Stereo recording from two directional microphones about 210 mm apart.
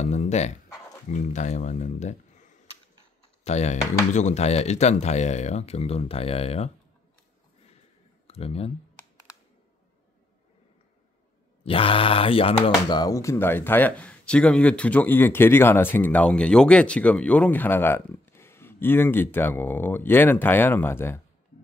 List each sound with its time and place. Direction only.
0.0 s dog: 35° left (ahead or behind)
1.0 s speech: 35° left (ahead or behind)
8.3 s speech: 30° left (ahead or behind)
11.6 s speech: 25° left (ahead or behind)